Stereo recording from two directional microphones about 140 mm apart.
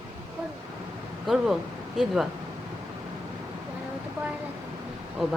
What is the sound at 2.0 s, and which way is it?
Speech, 5° right (ahead or behind).